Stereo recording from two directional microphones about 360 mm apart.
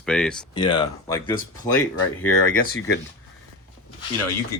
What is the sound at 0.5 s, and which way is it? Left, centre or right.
Speech, centre.